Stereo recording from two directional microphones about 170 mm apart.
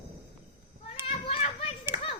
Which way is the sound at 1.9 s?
45° left (ahead or behind).